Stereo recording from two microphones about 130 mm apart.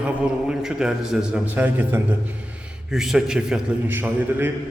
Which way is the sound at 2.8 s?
5° right (ahead or behind).